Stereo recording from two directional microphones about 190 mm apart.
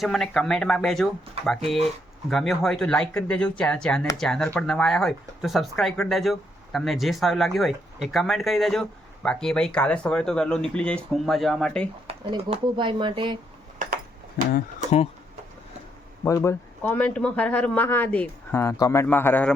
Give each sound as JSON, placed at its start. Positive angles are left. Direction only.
{"t": 0.0, "sound": "speech", "side_deg": 0}
{"t": 12.0, "sound": "speech", "side_deg": -30}
{"t": 13.7, "sound": "a sound", "side_deg": -45}
{"t": 16.2, "sound": "speech", "side_deg": 15}